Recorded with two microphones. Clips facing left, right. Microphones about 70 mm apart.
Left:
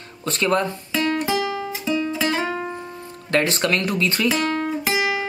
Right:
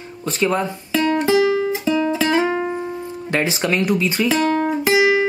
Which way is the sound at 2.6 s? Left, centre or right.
Right.